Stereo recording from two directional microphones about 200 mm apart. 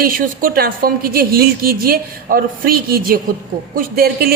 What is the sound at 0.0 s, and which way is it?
A woman's voice, 45° right (ahead or behind).